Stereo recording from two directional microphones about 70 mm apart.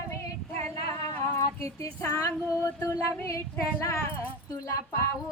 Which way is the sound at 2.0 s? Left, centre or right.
Left.